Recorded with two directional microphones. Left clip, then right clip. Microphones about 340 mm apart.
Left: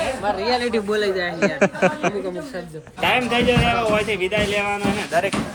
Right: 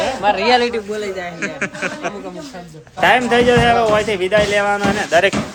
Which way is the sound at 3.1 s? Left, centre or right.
Centre.